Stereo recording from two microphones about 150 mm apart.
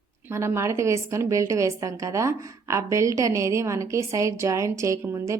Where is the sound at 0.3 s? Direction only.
15° right (ahead or behind).